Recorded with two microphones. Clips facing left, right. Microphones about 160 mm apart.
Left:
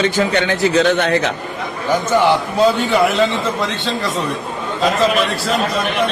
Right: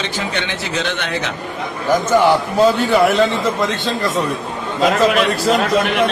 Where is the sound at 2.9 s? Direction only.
Centre (ahead or behind).